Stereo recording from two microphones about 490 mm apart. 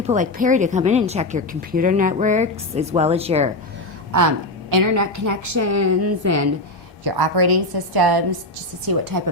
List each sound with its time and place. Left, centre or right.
0.0 s speech: centre
4.1 s a woman's voice: right
7.0 s a woman's voice: right